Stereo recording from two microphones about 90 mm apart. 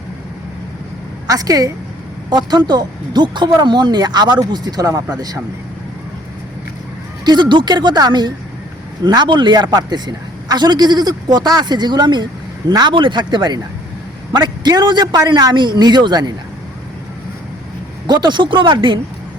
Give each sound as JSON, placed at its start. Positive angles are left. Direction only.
{"t": 1.3, "sound": "a woman's voice", "side_deg": -40}
{"t": 7.3, "sound": "a man's voice", "side_deg": -55}
{"t": 12.9, "sound": "a man's voice", "side_deg": -65}
{"t": 18.0, "sound": "speech", "side_deg": -60}